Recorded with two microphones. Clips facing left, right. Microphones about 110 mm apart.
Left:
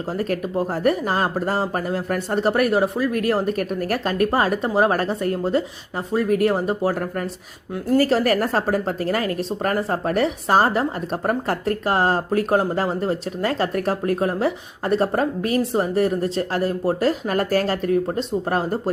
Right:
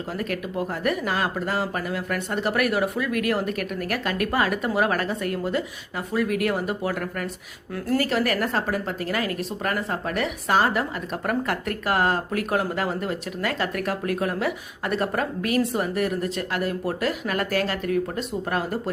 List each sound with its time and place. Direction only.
0.2 s speech: 35° left (ahead or behind)